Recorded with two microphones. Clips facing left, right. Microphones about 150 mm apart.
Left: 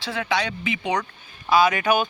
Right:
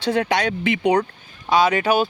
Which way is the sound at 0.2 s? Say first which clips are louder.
Right 1 dB; 50° right (ahead or behind).